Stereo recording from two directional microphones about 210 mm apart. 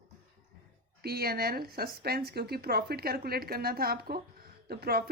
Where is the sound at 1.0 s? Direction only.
45° right (ahead or behind).